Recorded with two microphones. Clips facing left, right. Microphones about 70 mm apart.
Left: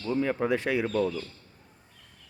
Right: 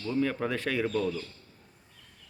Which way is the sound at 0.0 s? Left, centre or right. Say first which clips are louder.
Left 2 dB; centre.